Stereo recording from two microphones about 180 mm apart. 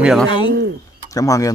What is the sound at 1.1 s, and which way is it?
Speech, 20° left (ahead or behind).